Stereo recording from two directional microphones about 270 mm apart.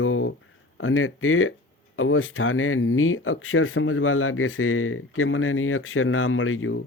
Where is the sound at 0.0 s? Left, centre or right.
Left.